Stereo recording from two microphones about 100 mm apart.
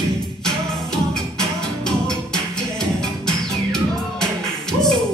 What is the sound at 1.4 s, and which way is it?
Music, 5° left (ahead or behind).